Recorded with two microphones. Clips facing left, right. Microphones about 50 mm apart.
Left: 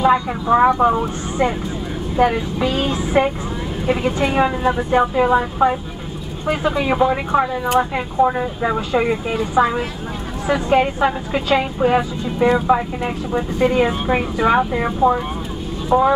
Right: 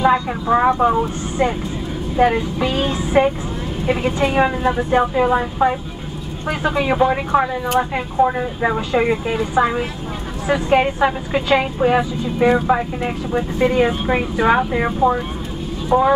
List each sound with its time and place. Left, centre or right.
0.0 s speech: centre
6.7 s speech: centre
8.2 s speech: right
8.5 s speech: centre
12.0 s speech: centre